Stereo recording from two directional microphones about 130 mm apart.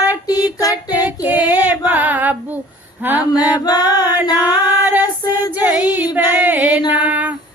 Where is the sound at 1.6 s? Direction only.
15° right (ahead or behind).